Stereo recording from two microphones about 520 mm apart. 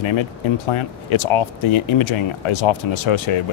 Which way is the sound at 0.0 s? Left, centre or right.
Left.